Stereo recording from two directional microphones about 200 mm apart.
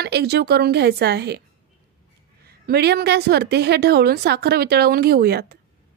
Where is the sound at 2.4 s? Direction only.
55° right (ahead or behind).